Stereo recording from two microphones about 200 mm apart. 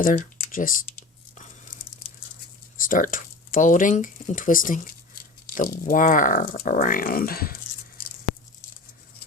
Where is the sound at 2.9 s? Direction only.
40° left (ahead or behind).